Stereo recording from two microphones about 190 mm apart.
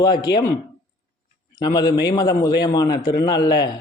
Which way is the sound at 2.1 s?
20° left (ahead or behind).